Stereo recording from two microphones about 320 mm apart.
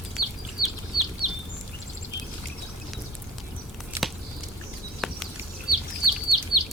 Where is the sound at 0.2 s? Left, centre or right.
Right.